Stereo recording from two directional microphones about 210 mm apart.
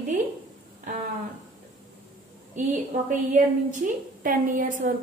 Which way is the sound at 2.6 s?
35° right (ahead or behind).